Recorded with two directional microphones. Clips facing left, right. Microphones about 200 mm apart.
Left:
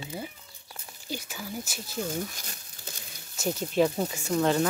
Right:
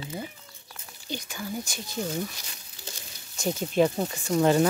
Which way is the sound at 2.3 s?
50° left (ahead or behind).